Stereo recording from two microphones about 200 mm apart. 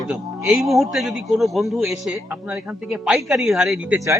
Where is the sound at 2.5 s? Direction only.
5° right (ahead or behind).